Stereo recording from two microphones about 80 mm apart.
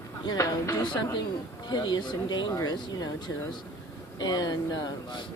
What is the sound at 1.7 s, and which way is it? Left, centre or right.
Speech, left.